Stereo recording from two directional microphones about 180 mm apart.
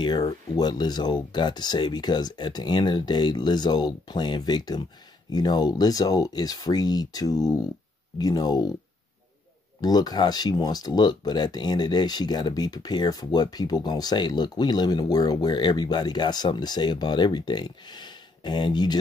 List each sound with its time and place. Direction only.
0.0 s speech: 25° left (ahead or behind)
9.8 s speech: 20° left (ahead or behind)